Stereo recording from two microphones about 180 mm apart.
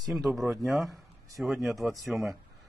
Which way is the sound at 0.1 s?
Centre (ahead or behind).